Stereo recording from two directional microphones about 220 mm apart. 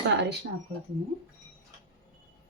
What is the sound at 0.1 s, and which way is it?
Speech, 50° right (ahead or behind).